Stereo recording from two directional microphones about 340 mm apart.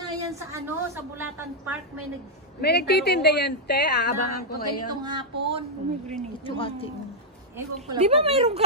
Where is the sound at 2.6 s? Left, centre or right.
Left.